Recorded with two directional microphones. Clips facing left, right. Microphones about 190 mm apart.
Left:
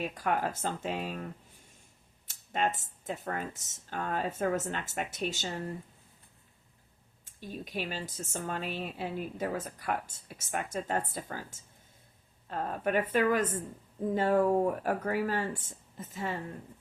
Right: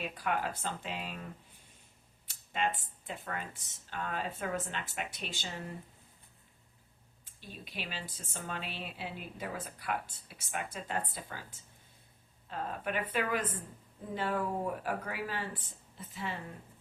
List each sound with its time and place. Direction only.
0.0 s a woman's voice: 45° left (ahead or behind)
2.5 s a woman's voice: 45° left (ahead or behind)
7.3 s a woman's voice: 45° left (ahead or behind)